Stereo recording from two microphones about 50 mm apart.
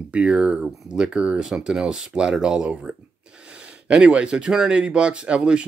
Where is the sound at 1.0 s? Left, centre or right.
Centre.